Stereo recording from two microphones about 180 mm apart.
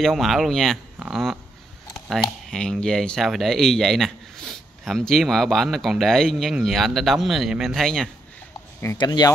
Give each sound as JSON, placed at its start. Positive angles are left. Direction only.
{"t": 0.0, "sound": "speech", "side_deg": 0}
{"t": 2.0, "sound": "a sound", "side_deg": 0}
{"t": 2.5, "sound": "speech", "side_deg": 5}
{"t": 8.9, "sound": "speech", "side_deg": 25}